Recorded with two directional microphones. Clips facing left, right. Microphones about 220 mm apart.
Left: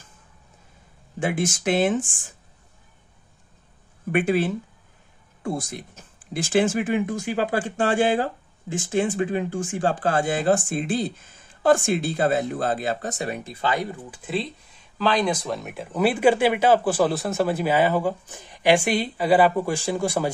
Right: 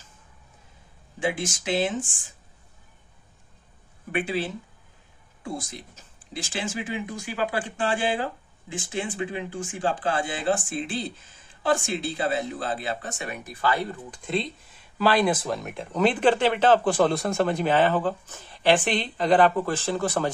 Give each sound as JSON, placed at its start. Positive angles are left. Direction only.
{"t": 1.2, "sound": "speech", "side_deg": 50}
{"t": 4.1, "sound": "speech", "side_deg": 45}
{"t": 5.9, "sound": "speech", "side_deg": 50}
{"t": 14.1, "sound": "speech", "side_deg": 5}